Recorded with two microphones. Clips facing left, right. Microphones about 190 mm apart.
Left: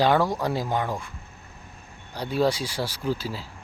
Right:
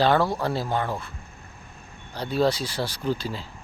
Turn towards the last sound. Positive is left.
turn(degrees=5)  # may be behind; listen again after turning